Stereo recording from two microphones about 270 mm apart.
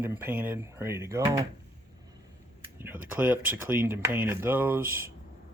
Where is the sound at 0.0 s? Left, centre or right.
Centre.